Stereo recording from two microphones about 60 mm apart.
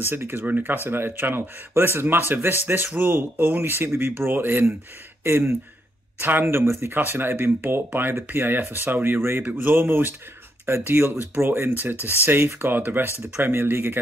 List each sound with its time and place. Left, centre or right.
0.1 s speech: right
0.5 s speech: right
0.8 s speech: right
6.2 s speech: right
9.4 s speech: right